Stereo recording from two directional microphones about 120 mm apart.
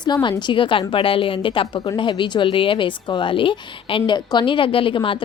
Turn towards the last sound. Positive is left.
turn(degrees=45)  # may be behind; listen again after turning